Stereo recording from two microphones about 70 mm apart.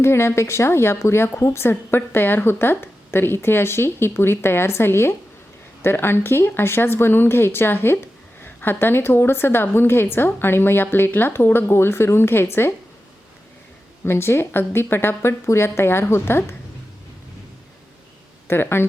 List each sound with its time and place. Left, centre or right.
0.0 s speech: left
14.0 s speech: left
18.4 s speech: left